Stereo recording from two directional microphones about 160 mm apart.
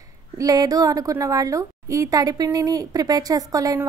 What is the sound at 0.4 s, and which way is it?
A woman's voice, 20° right (ahead or behind).